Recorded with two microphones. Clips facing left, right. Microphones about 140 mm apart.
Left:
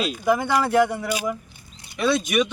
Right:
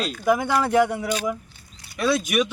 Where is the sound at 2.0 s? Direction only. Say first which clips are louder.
Left 1 dB; 5° right (ahead or behind).